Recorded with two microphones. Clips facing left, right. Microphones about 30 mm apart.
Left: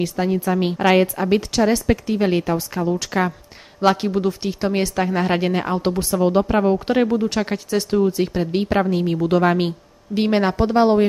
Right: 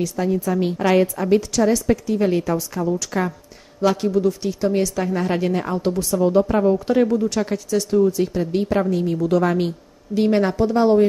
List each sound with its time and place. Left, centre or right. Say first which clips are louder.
0.0 s a woman's voice: left 1 dB; left